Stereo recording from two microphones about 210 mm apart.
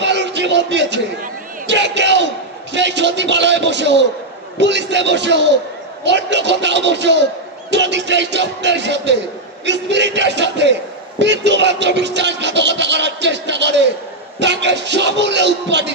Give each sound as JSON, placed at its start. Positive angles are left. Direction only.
{"t": 0.0, "sound": "music", "side_deg": -55}
{"t": 1.7, "sound": "a sound", "side_deg": -55}
{"t": 2.7, "sound": "a man's voice", "side_deg": -55}